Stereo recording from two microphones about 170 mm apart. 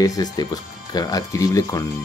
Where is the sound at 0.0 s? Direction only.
20° left (ahead or behind).